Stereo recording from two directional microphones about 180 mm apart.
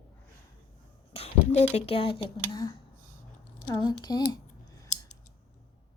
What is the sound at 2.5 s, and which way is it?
Speech, 20° left (ahead or behind).